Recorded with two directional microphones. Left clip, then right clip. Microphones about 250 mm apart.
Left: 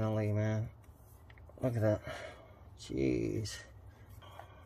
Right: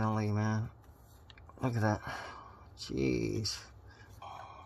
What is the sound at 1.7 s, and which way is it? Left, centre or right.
Speech, right.